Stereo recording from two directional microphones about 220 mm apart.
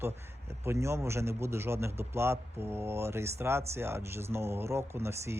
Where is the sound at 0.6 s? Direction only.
10° right (ahead or behind).